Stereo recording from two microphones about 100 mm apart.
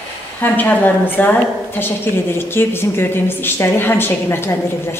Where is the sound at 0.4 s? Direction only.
20° left (ahead or behind).